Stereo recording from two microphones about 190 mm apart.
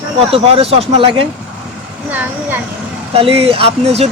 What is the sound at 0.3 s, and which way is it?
Speech, 30° right (ahead or behind).